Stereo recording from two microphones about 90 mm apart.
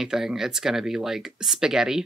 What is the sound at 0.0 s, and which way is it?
Speech, 5° right (ahead or behind).